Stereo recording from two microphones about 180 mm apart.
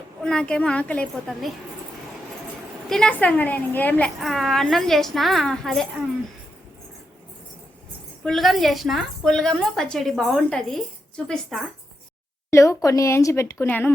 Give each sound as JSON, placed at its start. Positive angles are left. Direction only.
{"t": 0.2, "sound": "a woman's voice", "side_deg": 5}
{"t": 2.9, "sound": "a woman's voice", "side_deg": 5}
{"t": 8.2, "sound": "a woman's voice", "side_deg": 0}
{"t": 12.5, "sound": "speech", "side_deg": 15}